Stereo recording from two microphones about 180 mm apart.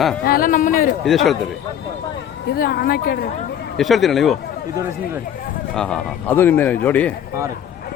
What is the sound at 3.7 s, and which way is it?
Speech, centre (ahead or behind).